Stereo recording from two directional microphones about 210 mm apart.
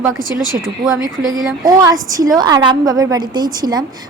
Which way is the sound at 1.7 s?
15° right (ahead or behind).